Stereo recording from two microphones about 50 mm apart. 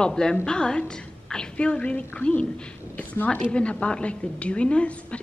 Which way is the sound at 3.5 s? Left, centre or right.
Left.